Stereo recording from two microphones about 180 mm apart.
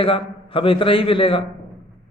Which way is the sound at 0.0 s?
30° left (ahead or behind).